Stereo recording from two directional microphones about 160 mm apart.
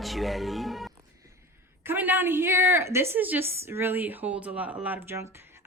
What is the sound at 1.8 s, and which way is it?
A woman's voice, 10° right (ahead or behind).